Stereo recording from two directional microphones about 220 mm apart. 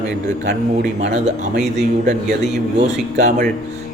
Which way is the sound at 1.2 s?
30° right (ahead or behind).